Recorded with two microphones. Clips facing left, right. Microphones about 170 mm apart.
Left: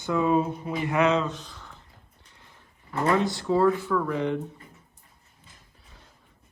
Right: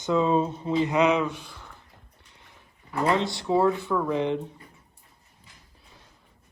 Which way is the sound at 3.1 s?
20° right (ahead or behind).